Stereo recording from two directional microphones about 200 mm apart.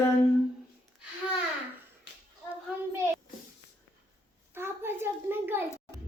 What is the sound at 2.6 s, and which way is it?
Speech, 15° right (ahead or behind).